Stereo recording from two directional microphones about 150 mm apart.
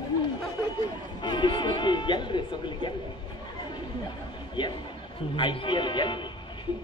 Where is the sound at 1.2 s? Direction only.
30° left (ahead or behind).